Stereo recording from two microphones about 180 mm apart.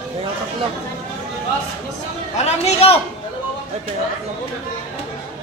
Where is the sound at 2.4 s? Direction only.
35° left (ahead or behind).